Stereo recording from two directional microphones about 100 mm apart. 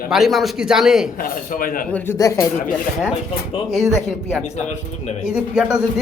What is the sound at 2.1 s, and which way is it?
Speech, 30° left (ahead or behind).